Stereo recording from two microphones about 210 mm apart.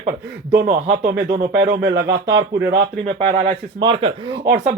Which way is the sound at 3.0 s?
35° right (ahead or behind).